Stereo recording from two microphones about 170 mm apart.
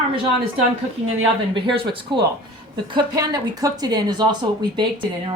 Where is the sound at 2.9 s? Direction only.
20° right (ahead or behind).